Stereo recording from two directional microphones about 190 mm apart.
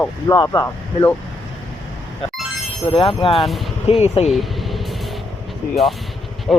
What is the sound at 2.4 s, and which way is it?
Music, centre (ahead or behind).